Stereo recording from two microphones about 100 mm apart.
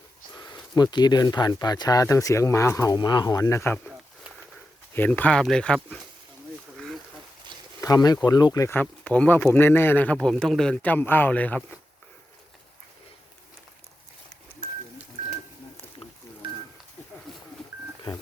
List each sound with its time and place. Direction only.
0.3 s speech: 45° left (ahead or behind)
2.9 s speech: 45° left (ahead or behind)
4.9 s speech: 20° left (ahead or behind)
6.7 s a sound: 5° left (ahead or behind)
7.8 s speech: 40° left (ahead or behind)
8.7 s speech: 15° left (ahead or behind)
10.2 s speech: 5° left (ahead or behind)
10.9 s speech: 20° left (ahead or behind)
17.3 s telephone dialing: centre (ahead or behind)